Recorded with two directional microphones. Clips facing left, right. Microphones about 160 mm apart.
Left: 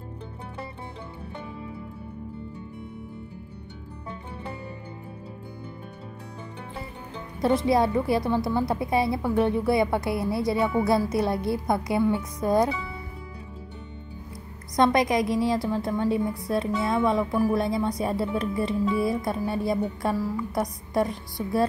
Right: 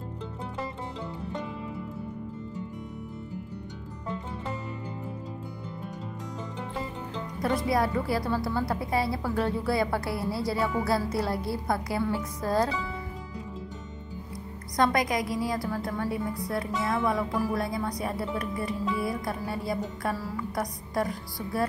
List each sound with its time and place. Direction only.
7.4 s a woman's voice: 25° left (ahead or behind)
14.8 s a woman's voice: 25° left (ahead or behind)